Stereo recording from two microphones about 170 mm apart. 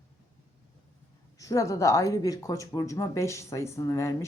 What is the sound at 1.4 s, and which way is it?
Speech, 20° left (ahead or behind).